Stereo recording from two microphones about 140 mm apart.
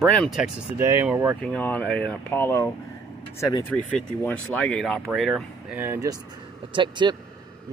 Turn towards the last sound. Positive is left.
turn(degrees=-35)  # may be behind; listen again after turning